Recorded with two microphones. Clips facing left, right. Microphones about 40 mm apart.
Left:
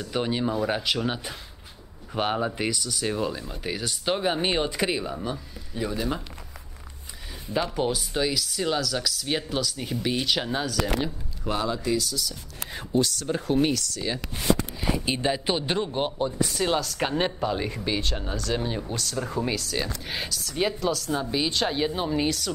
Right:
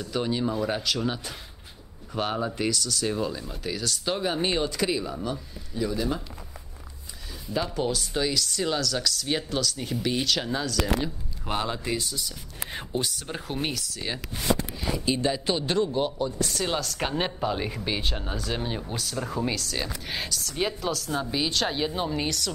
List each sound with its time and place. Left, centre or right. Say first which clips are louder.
0.0 s speech: left 1 dB; centre
5.1 s speech: even; centre
5.8 s speech: right 1 dB; left
7.7 s speech: left 1 dB; centre
11.4 s speech: left 2 dB; right; by 14.2 s centre
14.8 s a sound: left 3 dB; centre
15.0 s speech: right 2 dB; left
16.4 s speech: left 3 dB; centre